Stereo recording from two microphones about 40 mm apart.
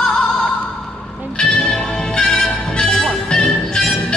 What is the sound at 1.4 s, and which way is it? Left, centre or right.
Music, centre.